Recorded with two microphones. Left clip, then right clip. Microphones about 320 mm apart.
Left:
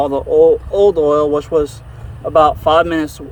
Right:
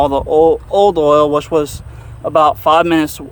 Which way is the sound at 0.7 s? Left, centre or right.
Right.